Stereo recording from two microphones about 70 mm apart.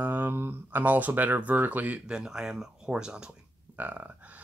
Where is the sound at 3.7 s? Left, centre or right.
Right.